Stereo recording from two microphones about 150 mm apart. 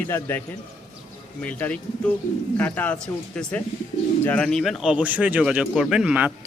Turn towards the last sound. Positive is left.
turn(degrees=-10)  # may be behind; listen again after turning